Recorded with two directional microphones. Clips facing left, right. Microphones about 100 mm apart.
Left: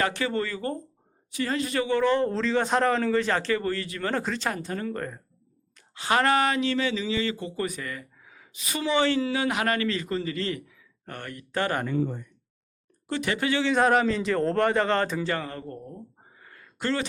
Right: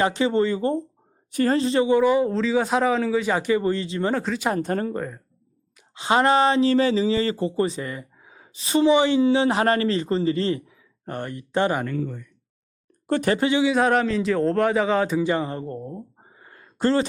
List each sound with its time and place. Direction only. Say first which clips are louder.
0.0 s speech: right 6 dB; 20° right (ahead or behind)
1.3 s a woman's voice: right 8 dB; 45° right (ahead or behind)
1.5 s a man's voice: right 5 dB; 25° right (ahead or behind)
4.1 s speech: right 3 dB; 5° right (ahead or behind)
4.6 s speech: right 7 dB; 45° right (ahead or behind)
4.9 s speech: right 4 dB; 5° right (ahead or behind)
5.9 s speech: right 4 dB; 20° right (ahead or behind)
11.9 s speech: left 1 dB; 30° left (ahead or behind)
13.1 s speech: right 7 dB; 45° right (ahead or behind)
13.4 s speech: right 3 dB; 20° right (ahead or behind)
13.7 s speech: right 2 dB; centre (ahead or behind); by 17.1 s 35° right (ahead or behind)